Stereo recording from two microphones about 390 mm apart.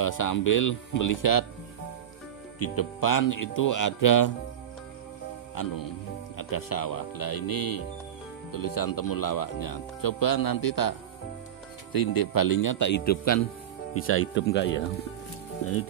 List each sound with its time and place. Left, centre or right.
0.0 s speech: left
2.6 s speech: left
5.5 s speech: left